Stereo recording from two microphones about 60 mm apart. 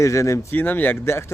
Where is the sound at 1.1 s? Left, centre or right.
Left.